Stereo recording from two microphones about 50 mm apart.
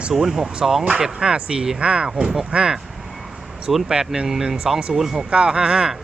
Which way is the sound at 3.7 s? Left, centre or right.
Centre.